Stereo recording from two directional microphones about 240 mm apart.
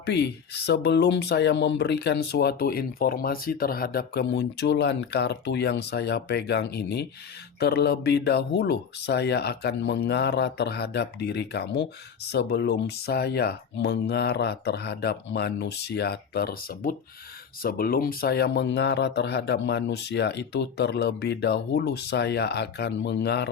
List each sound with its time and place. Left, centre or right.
0.0 s speech: left